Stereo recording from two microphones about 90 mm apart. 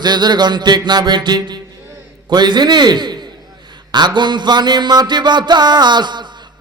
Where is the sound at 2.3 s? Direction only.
55° right (ahead or behind).